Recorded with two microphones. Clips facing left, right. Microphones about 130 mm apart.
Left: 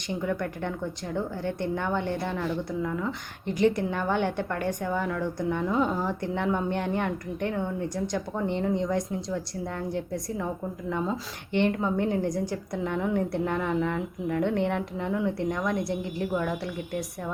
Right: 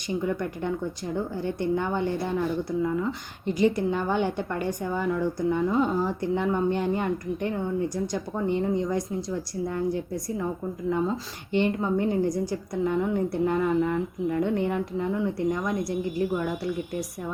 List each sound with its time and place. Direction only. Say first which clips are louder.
0.3 s a woman's voice: left 1 dB; 5° right (ahead or behind)
3.4 s a woman's voice: right 1 dB; 60° left (ahead or behind)
3.8 s a woman's voice: right 2 dB; 5° right (ahead or behind)
10.8 s a woman's voice: right 4 dB; 5° right (ahead or behind)